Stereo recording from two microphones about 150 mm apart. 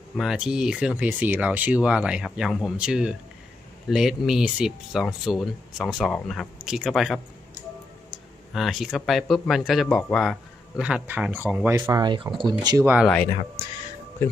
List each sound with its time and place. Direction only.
0.2 s speech: 5° right (ahead or behind)
8.5 s speech: centre (ahead or behind)
11.9 s speech: 30° right (ahead or behind)